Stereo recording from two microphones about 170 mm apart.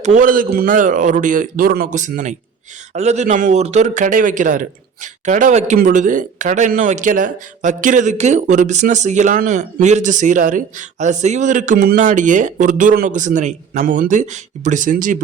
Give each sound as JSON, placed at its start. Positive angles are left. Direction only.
{"t": 0.0, "sound": "speech", "side_deg": -50}